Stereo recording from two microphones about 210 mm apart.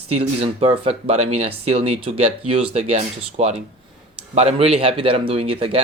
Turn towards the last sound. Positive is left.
turn(degrees=-25)  # may be behind; listen again after turning